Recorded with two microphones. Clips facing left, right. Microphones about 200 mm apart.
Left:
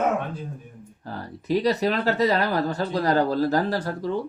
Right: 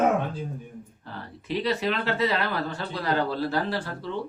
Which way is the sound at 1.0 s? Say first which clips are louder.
Left 9 dB; 40° left (ahead or behind).